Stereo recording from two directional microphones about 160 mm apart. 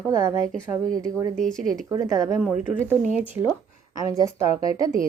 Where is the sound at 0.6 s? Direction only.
20° right (ahead or behind).